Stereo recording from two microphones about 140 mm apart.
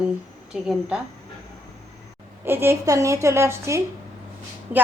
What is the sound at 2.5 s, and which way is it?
A woman's voice, 15° right (ahead or behind).